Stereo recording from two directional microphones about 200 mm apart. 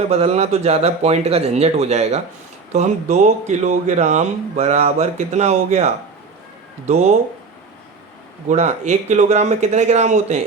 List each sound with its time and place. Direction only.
0.1 s speech: 30° right (ahead or behind)
8.4 s speech: 35° right (ahead or behind)